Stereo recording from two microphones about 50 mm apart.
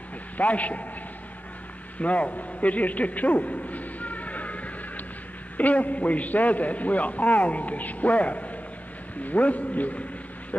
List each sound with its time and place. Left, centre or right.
0.4 s a man's voice: left
2.0 s a sound: left
5.6 s a man's voice: left